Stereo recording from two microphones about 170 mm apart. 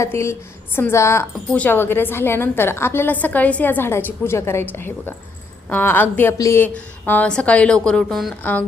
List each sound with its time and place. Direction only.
0.0 s a woman's voice: 15° left (ahead or behind)